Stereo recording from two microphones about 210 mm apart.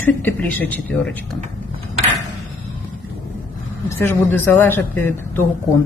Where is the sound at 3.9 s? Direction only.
10° left (ahead or behind).